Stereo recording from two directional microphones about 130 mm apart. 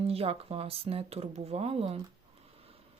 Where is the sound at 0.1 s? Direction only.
50° right (ahead or behind).